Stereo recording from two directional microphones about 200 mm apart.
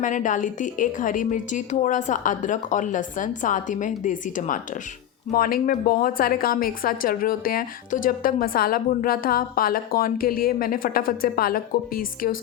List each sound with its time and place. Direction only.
0.0 s a woman's voice: 40° left (ahead or behind)